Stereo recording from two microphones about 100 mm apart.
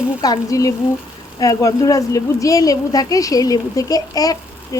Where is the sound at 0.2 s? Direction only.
40° left (ahead or behind).